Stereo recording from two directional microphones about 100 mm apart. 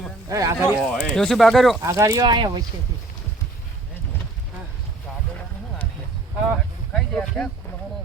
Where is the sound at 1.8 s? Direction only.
35° right (ahead or behind).